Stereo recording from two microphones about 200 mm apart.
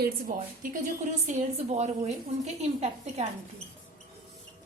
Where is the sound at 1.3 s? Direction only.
35° right (ahead or behind).